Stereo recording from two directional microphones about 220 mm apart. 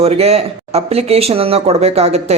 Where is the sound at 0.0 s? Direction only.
30° right (ahead or behind).